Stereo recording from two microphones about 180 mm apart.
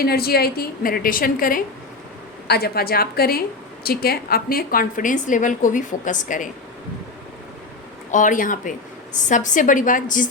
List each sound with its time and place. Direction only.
0.0 s a woman's voice: 60° left (ahead or behind)
8.1 s a woman's voice: 45° left (ahead or behind)